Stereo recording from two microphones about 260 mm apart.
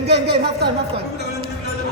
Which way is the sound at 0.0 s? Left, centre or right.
Right.